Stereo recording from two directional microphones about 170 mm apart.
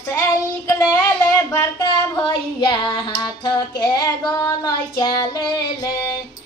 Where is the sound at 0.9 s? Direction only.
15° left (ahead or behind).